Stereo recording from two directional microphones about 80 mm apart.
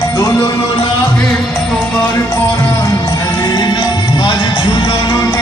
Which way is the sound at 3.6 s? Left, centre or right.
Left.